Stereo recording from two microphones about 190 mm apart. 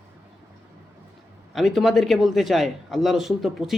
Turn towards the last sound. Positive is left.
turn(degrees=0)  # may be behind; listen again after turning